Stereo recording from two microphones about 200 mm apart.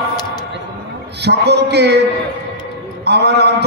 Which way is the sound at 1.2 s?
55° right (ahead or behind).